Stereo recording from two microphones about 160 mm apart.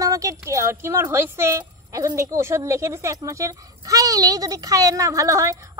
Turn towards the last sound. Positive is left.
turn(degrees=-20)  # may be behind; listen again after turning